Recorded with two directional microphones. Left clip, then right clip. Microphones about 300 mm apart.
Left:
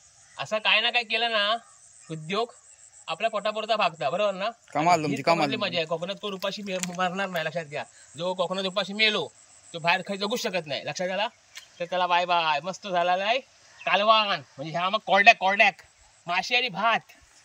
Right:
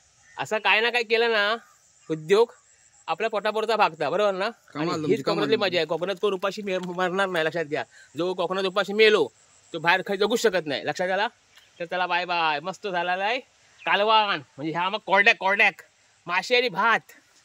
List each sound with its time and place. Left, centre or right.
0.4 s speech: centre
4.8 s a man's voice: centre
5.4 s speech: centre